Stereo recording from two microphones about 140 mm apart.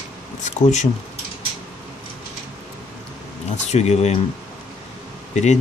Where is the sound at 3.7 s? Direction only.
50° left (ahead or behind).